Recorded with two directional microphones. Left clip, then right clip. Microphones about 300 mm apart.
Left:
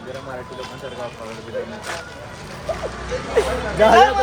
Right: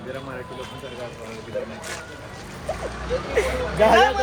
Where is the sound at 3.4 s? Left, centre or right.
Centre.